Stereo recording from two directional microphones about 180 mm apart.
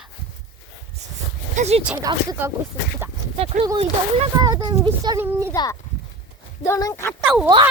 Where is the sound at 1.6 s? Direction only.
35° right (ahead or behind).